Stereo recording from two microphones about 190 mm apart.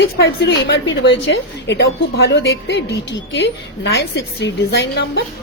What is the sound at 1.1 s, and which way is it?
A woman's voice, 80° left.